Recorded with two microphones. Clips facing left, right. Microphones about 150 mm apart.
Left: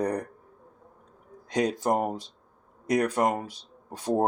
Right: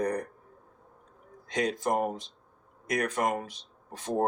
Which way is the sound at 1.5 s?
40° left (ahead or behind).